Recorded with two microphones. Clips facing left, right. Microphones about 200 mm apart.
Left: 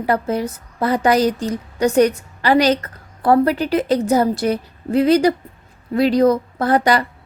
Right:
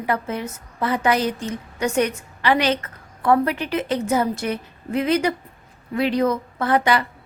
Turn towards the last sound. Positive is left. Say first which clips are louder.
# left 3 dB
turn(degrees=40)  # may be behind; listen again after turning